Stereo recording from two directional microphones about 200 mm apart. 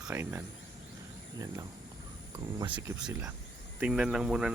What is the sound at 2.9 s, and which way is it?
Speech, 10° right (ahead or behind).